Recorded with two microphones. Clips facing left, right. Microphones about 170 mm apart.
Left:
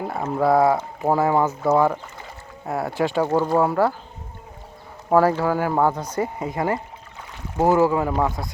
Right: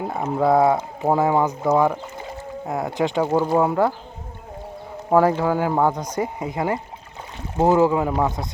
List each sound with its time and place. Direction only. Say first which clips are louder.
0.0 s speech: right 1 dB; 20° right (ahead or behind)
5.1 s speech: right 1 dB; 15° right (ahead or behind)